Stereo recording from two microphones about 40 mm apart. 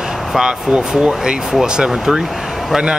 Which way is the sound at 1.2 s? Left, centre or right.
Centre.